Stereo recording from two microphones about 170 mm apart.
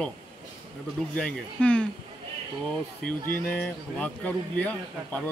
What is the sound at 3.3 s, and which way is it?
A man's voice, 10° left (ahead or behind).